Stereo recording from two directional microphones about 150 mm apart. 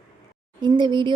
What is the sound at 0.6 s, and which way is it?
Speech, 30° right (ahead or behind).